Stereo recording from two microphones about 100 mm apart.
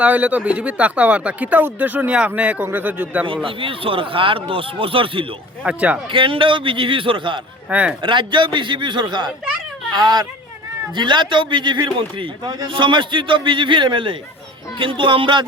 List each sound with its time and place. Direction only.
0.0 s speech: 15° right (ahead or behind)
3.4 s speech: 65° right (ahead or behind)
5.6 s speech: 10° right (ahead or behind)
6.1 s speech: 60° right (ahead or behind)
7.7 s speech: 15° right (ahead or behind)
8.0 s a man's voice: 55° right (ahead or behind)